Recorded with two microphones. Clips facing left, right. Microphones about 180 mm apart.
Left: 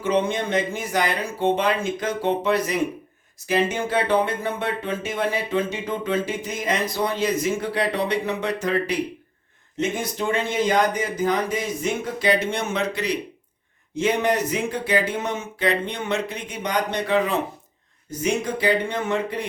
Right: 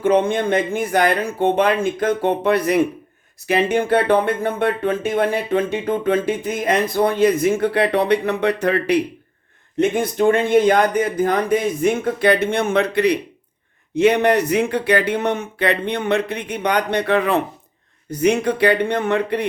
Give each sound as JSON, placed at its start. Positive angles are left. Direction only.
{"t": 0.0, "sound": "speech", "side_deg": -55}